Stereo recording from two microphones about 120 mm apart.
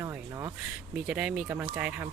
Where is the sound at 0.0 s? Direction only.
25° right (ahead or behind).